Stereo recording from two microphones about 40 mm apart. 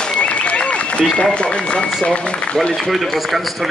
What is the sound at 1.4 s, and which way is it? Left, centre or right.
Run, left.